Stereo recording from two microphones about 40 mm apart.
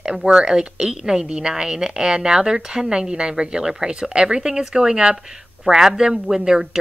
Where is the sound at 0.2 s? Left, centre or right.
Centre.